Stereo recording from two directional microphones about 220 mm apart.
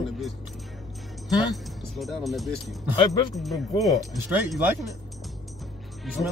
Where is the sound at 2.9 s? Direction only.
20° left (ahead or behind).